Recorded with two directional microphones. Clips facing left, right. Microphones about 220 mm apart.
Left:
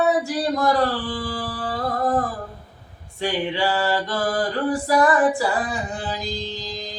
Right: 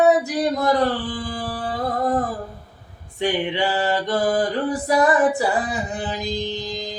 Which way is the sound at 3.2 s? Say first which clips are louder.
Right 2 dB; 20° right (ahead or behind).